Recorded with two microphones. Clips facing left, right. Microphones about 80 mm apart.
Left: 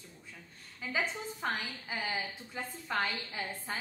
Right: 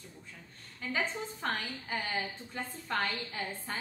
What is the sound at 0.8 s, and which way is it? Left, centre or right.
Speech, centre.